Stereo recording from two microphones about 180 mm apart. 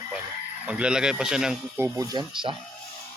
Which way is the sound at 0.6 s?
5° right (ahead or behind).